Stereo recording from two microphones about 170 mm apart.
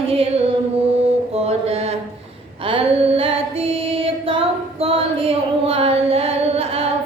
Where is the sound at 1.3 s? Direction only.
35° right (ahead or behind).